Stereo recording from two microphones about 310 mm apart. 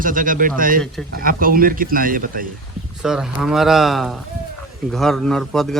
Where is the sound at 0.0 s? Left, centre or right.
Right.